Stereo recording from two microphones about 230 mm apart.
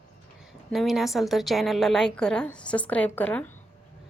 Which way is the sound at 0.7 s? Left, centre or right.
Centre.